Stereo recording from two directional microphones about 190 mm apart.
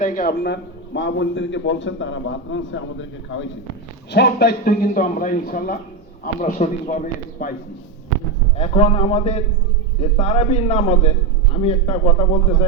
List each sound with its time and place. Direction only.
0.0 s a man's voice: 45° left (ahead or behind); by 3.4 s 85° left
4.1 s a man's voice: 60° left (ahead or behind)
8.5 s a man's voice: 35° left (ahead or behind)